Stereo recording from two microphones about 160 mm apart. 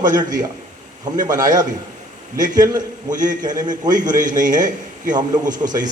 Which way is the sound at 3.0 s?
55° right (ahead or behind).